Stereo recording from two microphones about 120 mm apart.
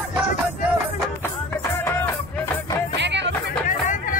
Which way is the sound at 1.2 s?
20° left (ahead or behind).